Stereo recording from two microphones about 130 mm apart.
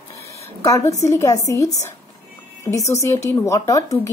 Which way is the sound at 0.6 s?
25° left (ahead or behind).